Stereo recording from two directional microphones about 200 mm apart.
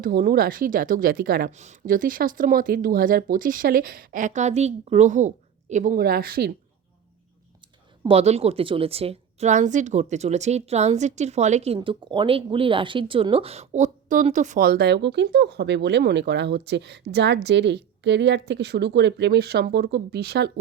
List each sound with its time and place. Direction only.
0.0 s a woman's voice: 45° right (ahead or behind)
8.0 s a woman's voice: 30° right (ahead or behind); by 20.5 s 55° right (ahead or behind)